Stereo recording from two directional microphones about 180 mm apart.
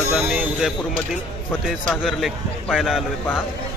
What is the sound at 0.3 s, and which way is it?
Speech, centre (ahead or behind).